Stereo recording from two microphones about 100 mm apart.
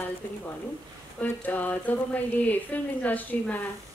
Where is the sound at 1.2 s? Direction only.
15° left (ahead or behind).